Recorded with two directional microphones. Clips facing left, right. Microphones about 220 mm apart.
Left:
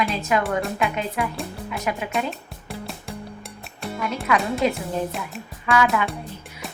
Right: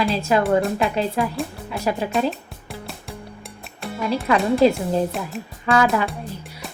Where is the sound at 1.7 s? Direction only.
30° right (ahead or behind).